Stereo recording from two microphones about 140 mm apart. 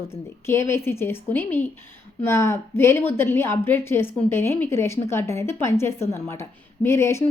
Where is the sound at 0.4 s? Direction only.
20° left (ahead or behind).